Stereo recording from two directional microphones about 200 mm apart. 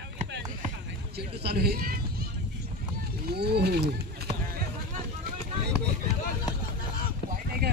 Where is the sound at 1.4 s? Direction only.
50° right (ahead or behind).